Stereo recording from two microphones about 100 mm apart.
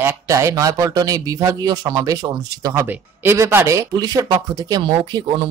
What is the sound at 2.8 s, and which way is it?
A woman's voice, 25° right (ahead or behind).